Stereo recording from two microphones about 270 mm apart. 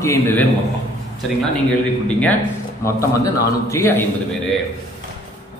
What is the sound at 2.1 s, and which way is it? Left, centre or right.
A man's voice, centre.